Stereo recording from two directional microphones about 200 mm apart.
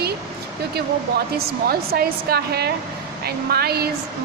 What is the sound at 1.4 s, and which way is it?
A woman's voice, 50° right (ahead or behind).